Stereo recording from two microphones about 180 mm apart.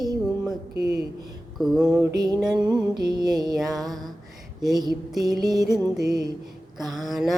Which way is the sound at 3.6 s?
Centre (ahead or behind).